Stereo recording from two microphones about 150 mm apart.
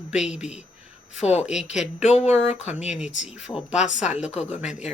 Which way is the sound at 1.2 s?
45° left (ahead or behind).